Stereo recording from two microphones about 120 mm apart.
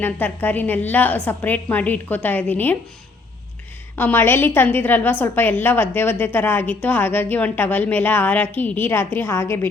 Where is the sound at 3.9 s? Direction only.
15° left (ahead or behind).